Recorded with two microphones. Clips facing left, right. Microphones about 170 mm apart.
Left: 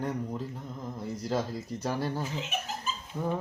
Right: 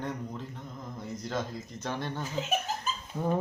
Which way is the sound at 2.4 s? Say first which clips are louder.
Right 4 dB; 40° right (ahead or behind).